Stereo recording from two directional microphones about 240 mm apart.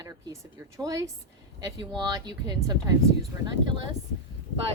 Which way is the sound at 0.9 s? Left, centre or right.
Centre.